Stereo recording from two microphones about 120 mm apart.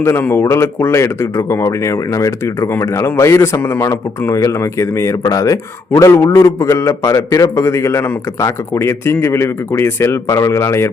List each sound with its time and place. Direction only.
0.0 s a man's voice: 20° left (ahead or behind)